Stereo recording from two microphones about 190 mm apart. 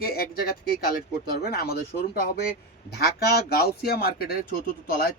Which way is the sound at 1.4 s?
55° left (ahead or behind).